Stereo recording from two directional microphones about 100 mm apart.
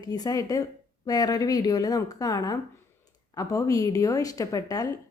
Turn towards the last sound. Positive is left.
turn(degrees=35)  # may be behind; listen again after turning